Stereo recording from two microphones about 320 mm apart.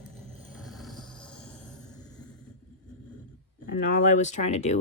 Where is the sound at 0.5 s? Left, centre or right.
Centre.